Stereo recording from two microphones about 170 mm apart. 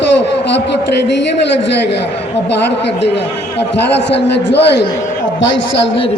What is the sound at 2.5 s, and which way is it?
Speech, 90° left.